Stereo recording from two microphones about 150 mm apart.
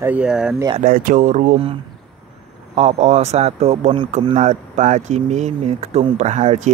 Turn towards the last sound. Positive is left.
turn(degrees=-50)  # may be behind; listen again after turning